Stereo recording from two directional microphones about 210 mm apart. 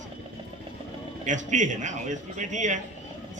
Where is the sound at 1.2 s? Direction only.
35° right (ahead or behind).